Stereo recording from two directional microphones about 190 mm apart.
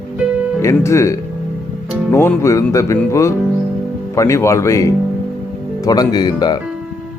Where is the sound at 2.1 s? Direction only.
15° left (ahead or behind).